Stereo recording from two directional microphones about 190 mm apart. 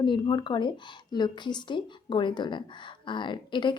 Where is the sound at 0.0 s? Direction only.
25° left (ahead or behind).